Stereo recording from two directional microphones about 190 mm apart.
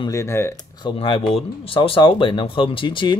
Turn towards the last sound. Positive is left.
turn(degrees=25)  # may be behind; listen again after turning